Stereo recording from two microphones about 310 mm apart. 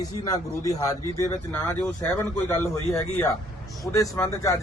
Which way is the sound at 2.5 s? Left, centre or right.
Centre.